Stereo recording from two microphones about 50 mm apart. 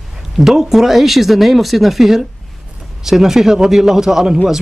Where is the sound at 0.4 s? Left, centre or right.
Centre.